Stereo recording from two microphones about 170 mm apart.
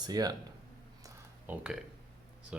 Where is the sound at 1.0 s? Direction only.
10° right (ahead or behind).